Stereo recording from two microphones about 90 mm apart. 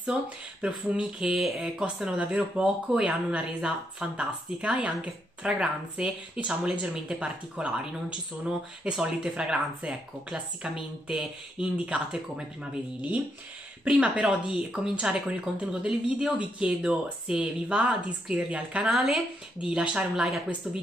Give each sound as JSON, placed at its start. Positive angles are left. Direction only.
{"t": 0.0, "sound": "speech", "side_deg": -10}
{"t": 13.8, "sound": "speech", "side_deg": -10}